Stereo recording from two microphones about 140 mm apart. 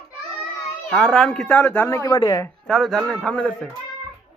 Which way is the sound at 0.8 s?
5° left (ahead or behind).